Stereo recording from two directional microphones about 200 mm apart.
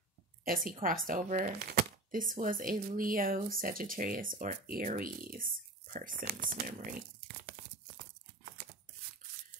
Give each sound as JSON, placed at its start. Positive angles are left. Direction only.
{"t": 0.8, "sound": "speech", "side_deg": -45}